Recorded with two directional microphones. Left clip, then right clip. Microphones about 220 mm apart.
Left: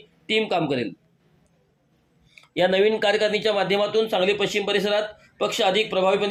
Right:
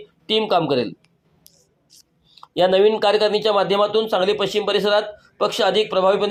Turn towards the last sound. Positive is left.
turn(degrees=-15)  # may be behind; listen again after turning